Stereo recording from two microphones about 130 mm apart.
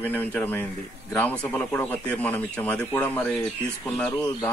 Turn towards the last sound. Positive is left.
turn(degrees=10)  # may be behind; listen again after turning